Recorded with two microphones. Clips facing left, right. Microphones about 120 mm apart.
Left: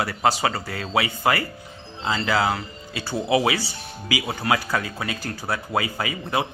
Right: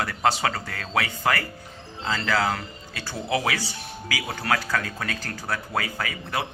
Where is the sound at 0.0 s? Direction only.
5° left (ahead or behind).